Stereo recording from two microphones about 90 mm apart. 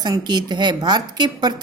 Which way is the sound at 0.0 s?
50° right (ahead or behind).